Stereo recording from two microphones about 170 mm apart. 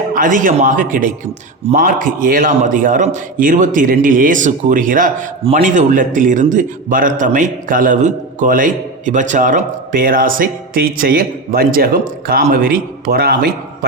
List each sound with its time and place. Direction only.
0.1 s a man's voice: 50° right (ahead or behind)